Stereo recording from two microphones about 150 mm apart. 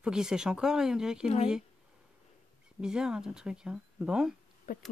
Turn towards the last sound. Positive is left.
turn(degrees=70)  # may be behind; listen again after turning